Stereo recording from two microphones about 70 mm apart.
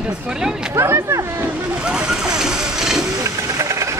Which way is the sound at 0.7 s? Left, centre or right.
Right.